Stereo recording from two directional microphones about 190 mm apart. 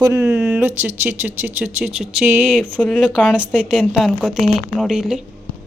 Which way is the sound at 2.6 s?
5° left (ahead or behind).